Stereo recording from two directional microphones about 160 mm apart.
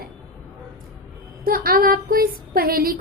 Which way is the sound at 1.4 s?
65° right (ahead or behind).